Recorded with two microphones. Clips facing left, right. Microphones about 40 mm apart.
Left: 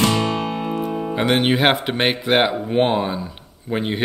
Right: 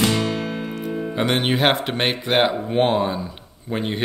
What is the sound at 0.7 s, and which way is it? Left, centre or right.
Music, centre.